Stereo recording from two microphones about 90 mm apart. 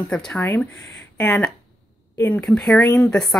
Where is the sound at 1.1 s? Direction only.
15° left (ahead or behind).